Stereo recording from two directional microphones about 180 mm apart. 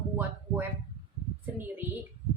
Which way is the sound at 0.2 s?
10° right (ahead or behind).